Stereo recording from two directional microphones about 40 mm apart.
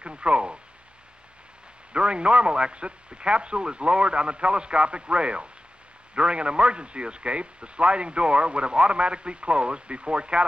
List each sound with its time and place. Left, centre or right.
0.0 s speech: right
1.9 s a man's voice: right